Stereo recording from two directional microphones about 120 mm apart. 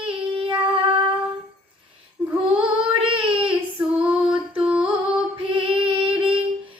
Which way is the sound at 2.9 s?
45° right (ahead or behind).